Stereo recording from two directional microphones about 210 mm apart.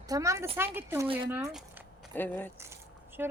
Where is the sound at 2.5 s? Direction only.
10° right (ahead or behind).